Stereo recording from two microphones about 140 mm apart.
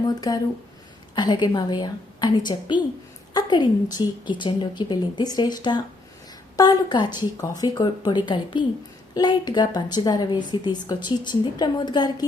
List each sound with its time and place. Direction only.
0.3 s a woman's voice: 25° left (ahead or behind)